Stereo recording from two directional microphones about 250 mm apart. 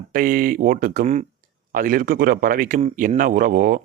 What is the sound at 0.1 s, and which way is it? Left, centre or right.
Speech, right.